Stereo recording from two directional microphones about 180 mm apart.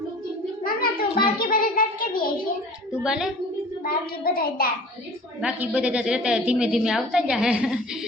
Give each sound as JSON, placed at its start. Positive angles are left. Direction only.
{"t": 0.6, "sound": "cat", "side_deg": 55}
{"t": 3.0, "sound": "a woman's voice", "side_deg": -5}
{"t": 3.8, "sound": "a child's voice", "side_deg": 55}
{"t": 5.4, "sound": "a woman's voice", "side_deg": -5}